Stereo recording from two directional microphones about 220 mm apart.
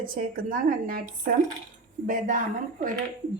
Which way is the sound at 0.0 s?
40° right (ahead or behind).